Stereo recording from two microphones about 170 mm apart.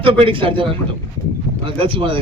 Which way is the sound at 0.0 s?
30° right (ahead or behind).